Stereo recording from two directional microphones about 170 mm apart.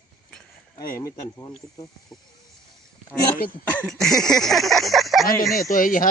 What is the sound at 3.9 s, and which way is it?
Speech, centre (ahead or behind).